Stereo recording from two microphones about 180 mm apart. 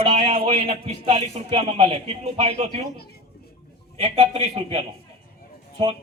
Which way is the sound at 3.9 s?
30° right (ahead or behind).